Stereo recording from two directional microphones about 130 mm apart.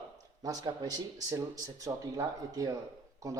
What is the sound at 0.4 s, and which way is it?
Speech, 30° right (ahead or behind).